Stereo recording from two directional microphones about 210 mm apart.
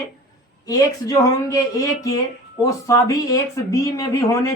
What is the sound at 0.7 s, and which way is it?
Speech, 15° left (ahead or behind).